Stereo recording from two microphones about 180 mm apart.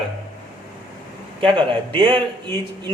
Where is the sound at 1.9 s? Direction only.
30° right (ahead or behind).